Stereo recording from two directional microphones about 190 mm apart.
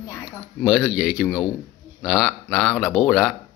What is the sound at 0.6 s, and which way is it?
Speech, centre (ahead or behind).